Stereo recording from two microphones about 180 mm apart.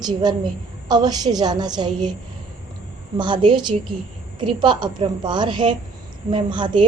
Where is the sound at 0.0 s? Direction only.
25° right (ahead or behind).